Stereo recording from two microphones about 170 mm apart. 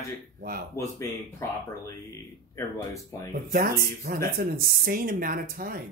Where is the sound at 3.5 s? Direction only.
60° right (ahead or behind).